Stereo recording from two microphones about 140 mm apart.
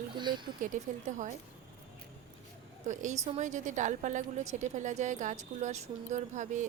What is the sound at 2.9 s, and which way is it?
Speech, 60° right (ahead or behind).